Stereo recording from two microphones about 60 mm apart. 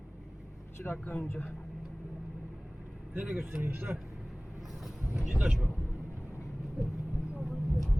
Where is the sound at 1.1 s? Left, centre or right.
Left.